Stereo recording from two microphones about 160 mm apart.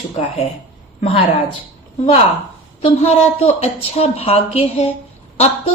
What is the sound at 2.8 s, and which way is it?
A woman's voice, 40° left (ahead or behind).